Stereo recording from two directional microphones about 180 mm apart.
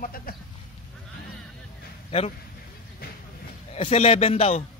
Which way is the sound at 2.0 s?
35° left (ahead or behind).